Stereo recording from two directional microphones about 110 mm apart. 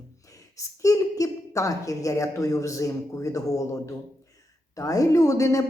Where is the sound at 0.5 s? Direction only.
30° left (ahead or behind).